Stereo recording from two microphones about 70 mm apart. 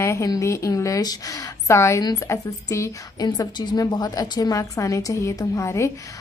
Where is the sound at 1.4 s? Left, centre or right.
Left.